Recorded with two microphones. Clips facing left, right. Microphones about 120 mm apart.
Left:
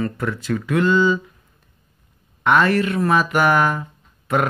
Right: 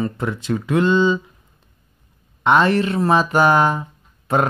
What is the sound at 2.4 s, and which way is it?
Speech, 25° right (ahead or behind).